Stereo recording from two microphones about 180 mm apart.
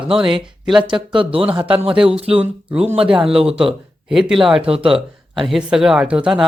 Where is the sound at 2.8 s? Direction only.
30° right (ahead or behind).